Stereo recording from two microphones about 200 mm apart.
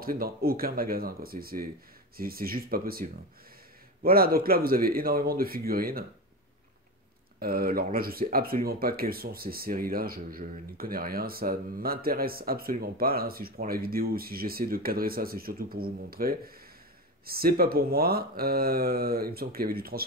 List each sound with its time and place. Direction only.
0.0 s speech: 45° right (ahead or behind)
7.3 s speech: 45° right (ahead or behind)